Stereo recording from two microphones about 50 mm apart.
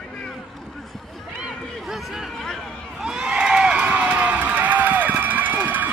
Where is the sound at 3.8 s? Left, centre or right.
Right.